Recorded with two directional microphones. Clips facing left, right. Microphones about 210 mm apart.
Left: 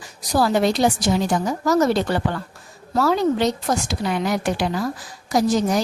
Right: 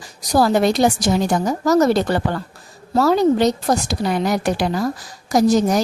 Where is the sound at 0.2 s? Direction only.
40° right (ahead or behind).